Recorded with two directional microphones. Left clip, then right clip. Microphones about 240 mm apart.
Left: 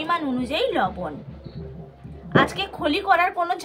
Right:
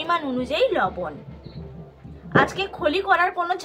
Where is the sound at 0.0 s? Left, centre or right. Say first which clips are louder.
Right 1 dB; centre.